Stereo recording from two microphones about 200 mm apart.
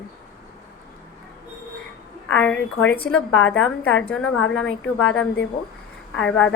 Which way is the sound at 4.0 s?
5° left (ahead or behind).